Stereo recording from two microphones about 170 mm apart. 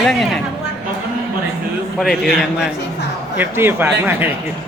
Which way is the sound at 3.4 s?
15° right (ahead or behind).